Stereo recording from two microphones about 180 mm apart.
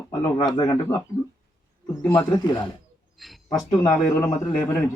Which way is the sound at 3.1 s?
Centre (ahead or behind).